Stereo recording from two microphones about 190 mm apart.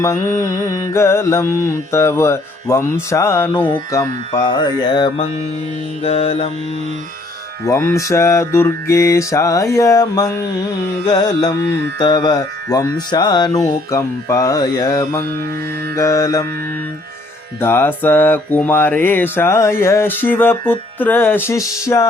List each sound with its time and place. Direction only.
0.0 s mantra: 15° left (ahead or behind)
3.9 s music: 20° left (ahead or behind)
6.0 s mantra: 30° left (ahead or behind)
7.6 s mantra: 15° left (ahead or behind)
11.0 s music: 20° left (ahead or behind)
16.0 s mantra: 15° left (ahead or behind)
17.6 s mantra: 10° left (ahead or behind)